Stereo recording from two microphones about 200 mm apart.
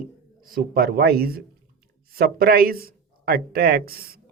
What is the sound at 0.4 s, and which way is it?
Speech, 45° right (ahead or behind).